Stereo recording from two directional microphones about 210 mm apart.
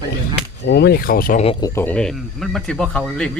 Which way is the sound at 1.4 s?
25° left (ahead or behind).